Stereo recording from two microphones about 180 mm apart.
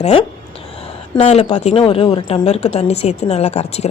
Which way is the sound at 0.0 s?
30° left (ahead or behind).